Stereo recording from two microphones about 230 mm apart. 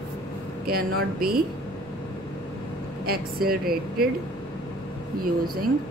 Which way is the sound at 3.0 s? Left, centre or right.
Right.